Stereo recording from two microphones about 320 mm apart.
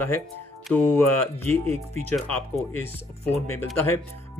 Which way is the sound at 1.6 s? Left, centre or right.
Centre.